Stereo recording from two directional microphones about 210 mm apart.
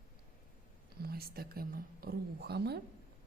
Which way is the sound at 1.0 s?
45° right (ahead or behind).